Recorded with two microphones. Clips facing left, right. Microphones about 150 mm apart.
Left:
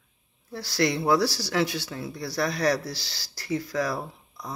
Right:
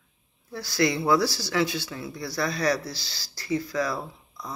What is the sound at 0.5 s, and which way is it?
Speech, 30° left (ahead or behind).